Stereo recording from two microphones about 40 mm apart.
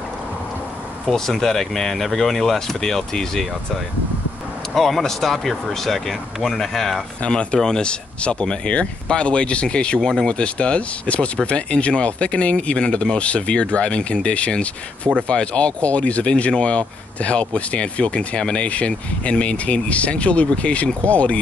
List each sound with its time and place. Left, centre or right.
1.0 s speech: centre
4.7 s speech: centre
7.2 s speech: left
10.0 s speech: centre
10.3 s speech: left